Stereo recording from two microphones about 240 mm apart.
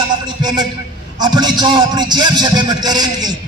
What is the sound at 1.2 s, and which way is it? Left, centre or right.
A man's voice, centre.